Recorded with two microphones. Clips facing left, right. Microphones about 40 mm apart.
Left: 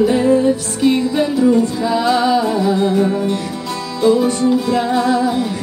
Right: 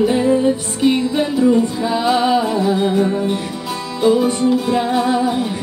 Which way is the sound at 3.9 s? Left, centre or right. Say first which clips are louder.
Left 1 dB; centre.